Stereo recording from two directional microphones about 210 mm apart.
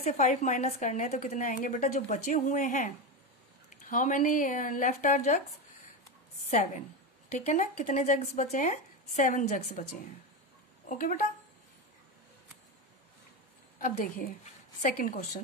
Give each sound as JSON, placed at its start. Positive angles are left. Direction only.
{"t": 0.0, "sound": "a woman's voice", "side_deg": 35}
{"t": 6.5, "sound": "a woman's voice", "side_deg": 35}
{"t": 13.7, "sound": "a woman's voice", "side_deg": 40}